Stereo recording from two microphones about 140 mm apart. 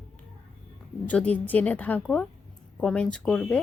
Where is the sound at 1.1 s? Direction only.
10° left (ahead or behind).